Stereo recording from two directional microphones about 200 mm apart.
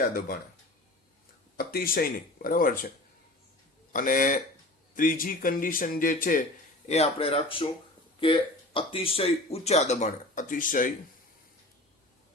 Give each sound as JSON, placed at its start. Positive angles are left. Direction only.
{"t": 0.0, "sound": "speech", "side_deg": 50}
{"t": 1.5, "sound": "speech", "side_deg": 45}
{"t": 3.9, "sound": "speech", "side_deg": 45}
{"t": 6.8, "sound": "speech", "side_deg": 30}